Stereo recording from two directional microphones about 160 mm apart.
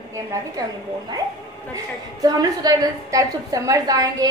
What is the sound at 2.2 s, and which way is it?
A woman's voice, 20° right (ahead or behind).